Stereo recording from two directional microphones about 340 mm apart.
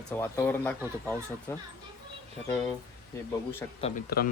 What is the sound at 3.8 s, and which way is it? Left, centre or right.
Speech, left.